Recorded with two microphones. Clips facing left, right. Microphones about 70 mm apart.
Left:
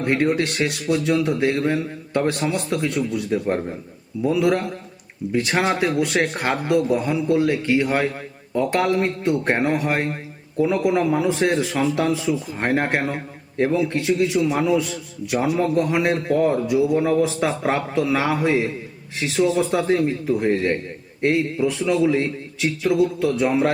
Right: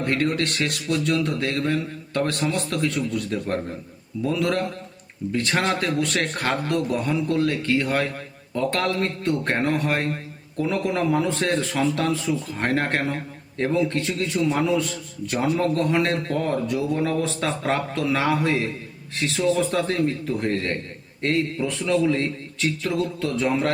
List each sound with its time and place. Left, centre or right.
0.0 s a man's voice: centre